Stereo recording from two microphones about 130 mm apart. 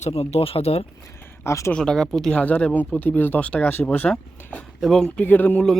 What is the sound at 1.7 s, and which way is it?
Speech, 5° left (ahead or behind).